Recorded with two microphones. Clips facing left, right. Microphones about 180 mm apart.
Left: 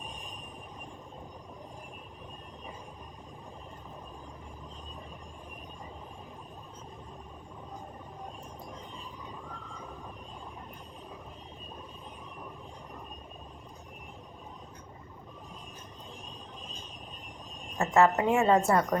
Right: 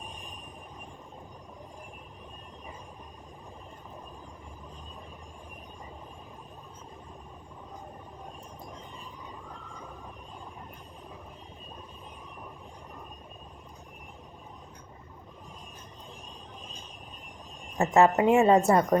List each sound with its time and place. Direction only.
17.7 s a woman's voice: 20° right (ahead or behind)